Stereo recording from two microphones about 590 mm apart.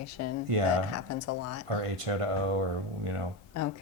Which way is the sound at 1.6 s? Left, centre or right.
Right.